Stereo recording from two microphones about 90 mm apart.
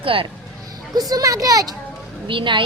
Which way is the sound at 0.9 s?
45° right (ahead or behind).